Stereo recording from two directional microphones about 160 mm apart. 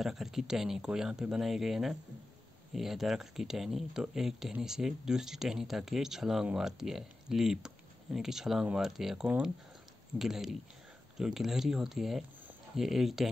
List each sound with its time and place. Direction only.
0.0 s speech: centre (ahead or behind)